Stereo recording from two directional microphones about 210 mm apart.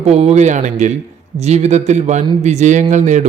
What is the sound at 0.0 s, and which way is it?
Speech, 30° right (ahead or behind).